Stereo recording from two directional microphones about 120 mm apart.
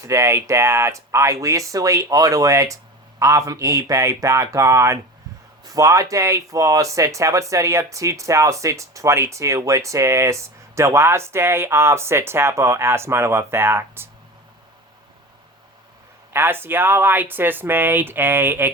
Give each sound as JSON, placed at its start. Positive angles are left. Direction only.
{"t": 0.0, "sound": "speech", "side_deg": -25}
{"t": 16.3, "sound": "speech", "side_deg": -20}